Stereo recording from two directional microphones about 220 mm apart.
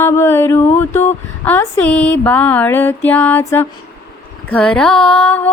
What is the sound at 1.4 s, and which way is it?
Music, 10° left (ahead or behind).